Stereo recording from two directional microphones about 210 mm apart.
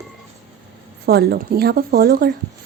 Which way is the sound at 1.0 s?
50° right (ahead or behind).